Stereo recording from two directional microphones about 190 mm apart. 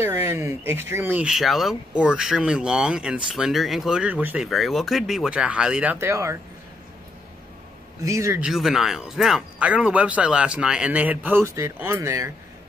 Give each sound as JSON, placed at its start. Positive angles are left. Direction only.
{"t": 0.0, "sound": "speech", "side_deg": -15}
{"t": 8.0, "sound": "speech", "side_deg": -15}
{"t": 8.5, "sound": "speech", "side_deg": 0}